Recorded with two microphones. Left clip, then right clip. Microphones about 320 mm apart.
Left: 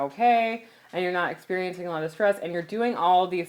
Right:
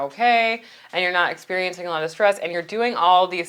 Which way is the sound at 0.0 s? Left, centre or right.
Right.